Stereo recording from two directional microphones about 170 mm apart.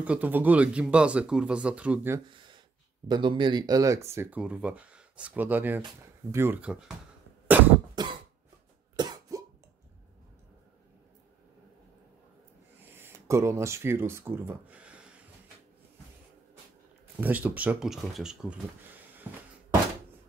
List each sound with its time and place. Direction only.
0.0 s speech: 10° right (ahead or behind)
3.1 s speech: 30° right (ahead or behind); by 7.0 s 5° right (ahead or behind)
7.9 s cough: 25° right (ahead or behind)
12.9 s speech: 15° right (ahead or behind)
17.2 s speech: 10° right (ahead or behind)
19.2 s a sound: 10° right (ahead or behind)